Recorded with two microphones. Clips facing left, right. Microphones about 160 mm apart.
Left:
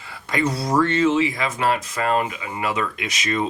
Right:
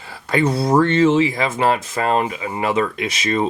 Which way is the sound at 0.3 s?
30° right (ahead or behind).